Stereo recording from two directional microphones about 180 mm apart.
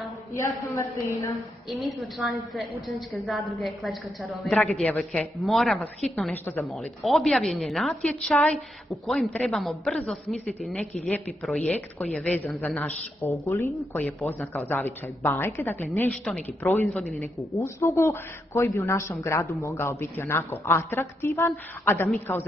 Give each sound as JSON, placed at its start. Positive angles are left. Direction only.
{"t": 0.3, "sound": "speech", "side_deg": 15}
{"t": 1.7, "sound": "a woman's voice", "side_deg": 0}
{"t": 16.1, "sound": "a woman's voice", "side_deg": 0}
{"t": 17.5, "sound": "speech", "side_deg": 15}